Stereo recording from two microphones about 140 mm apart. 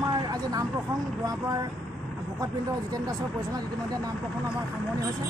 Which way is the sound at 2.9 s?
25° right (ahead or behind).